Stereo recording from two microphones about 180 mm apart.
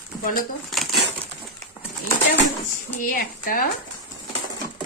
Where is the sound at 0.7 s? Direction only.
Centre (ahead or behind).